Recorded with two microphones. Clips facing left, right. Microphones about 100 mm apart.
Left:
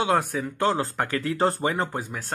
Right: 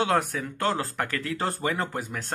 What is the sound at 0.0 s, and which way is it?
Speech, 15° left (ahead or behind).